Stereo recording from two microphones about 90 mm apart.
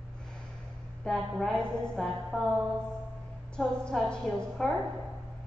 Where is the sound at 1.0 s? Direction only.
5° left (ahead or behind).